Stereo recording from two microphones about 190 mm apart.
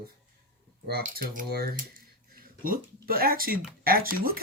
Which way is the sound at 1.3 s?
55° right (ahead or behind).